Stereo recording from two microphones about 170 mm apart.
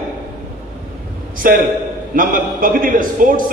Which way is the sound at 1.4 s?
55° right (ahead or behind).